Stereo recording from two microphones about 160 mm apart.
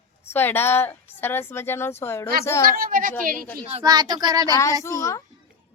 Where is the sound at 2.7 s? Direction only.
60° right (ahead or behind).